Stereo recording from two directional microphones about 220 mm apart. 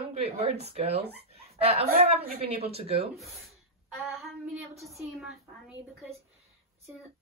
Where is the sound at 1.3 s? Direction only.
25° right (ahead or behind).